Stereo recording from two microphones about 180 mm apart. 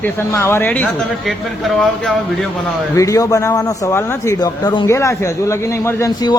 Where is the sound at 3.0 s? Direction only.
20° left (ahead or behind).